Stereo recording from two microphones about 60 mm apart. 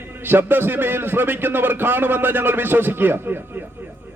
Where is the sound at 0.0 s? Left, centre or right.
Right.